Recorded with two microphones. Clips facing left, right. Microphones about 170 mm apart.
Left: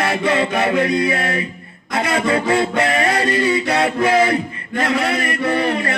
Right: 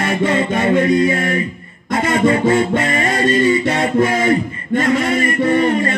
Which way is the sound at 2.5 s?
75° left (ahead or behind).